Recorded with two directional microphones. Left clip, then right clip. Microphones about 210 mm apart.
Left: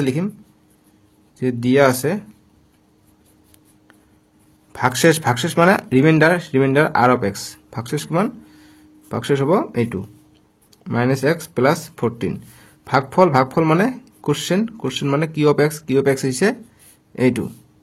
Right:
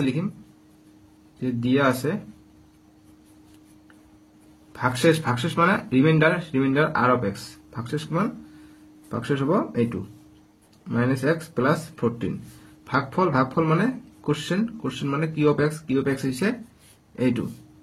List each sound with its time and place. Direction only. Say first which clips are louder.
1.4 s speech: left 7 dB; 50° left (ahead or behind)
4.7 s speech: left 5 dB; 50° left (ahead or behind)